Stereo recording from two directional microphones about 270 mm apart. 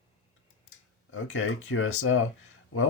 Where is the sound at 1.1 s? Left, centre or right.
Left.